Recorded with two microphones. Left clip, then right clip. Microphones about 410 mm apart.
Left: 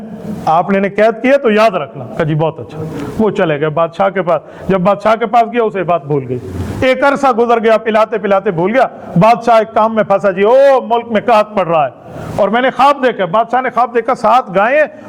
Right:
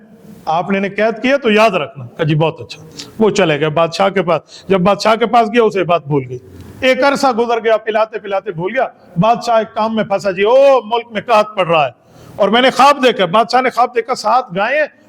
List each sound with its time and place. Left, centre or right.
0.4 s a man's voice: right
6.7 s a man's voice: right; by 8.2 s centre
8.2 s a man's voice: centre